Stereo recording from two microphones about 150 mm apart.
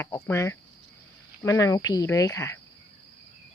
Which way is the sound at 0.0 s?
15° left (ahead or behind).